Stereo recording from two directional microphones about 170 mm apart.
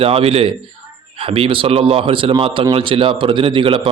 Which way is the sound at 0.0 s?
35° right (ahead or behind).